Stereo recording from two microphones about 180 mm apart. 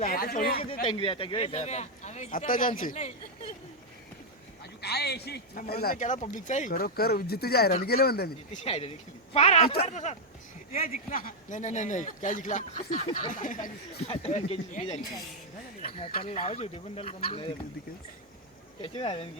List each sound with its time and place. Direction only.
0.0 s speech: 55° left (ahead or behind)
0.9 s a man's voice: 30° left (ahead or behind)
4.8 s a man's voice: 65° left (ahead or behind)
8.5 s a man's voice: 35° left (ahead or behind)
10.7 s speech: 50° left (ahead or behind)
13.1 s a man's voice: 30° left (ahead or behind)
13.3 s a man's voice: 45° left (ahead or behind)
15.9 s a man's voice: 30° left (ahead or behind)
18.8 s a man's voice: 30° left (ahead or behind)